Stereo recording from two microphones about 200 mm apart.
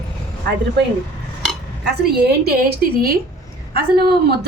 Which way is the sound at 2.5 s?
55° right (ahead or behind).